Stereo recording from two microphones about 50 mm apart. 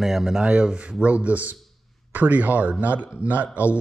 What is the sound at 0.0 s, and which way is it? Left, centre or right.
Speech, centre.